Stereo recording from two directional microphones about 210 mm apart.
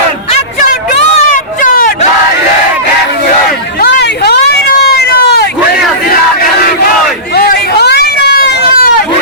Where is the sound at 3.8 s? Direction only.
55° left (ahead or behind).